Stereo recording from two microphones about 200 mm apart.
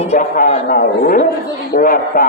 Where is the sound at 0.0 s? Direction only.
35° left (ahead or behind).